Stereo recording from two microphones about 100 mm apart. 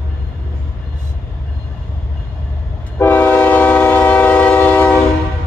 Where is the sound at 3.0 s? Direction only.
20° left (ahead or behind).